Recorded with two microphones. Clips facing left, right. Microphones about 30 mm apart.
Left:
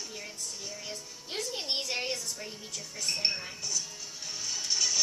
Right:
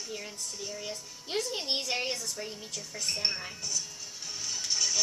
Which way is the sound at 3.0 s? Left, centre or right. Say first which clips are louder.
Left 1 dB; centre.